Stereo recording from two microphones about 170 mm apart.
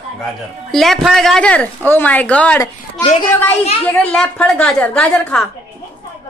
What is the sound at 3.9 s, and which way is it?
A woman's voice, 5° left (ahead or behind).